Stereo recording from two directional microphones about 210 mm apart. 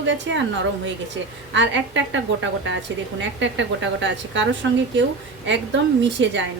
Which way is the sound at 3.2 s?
60° right (ahead or behind).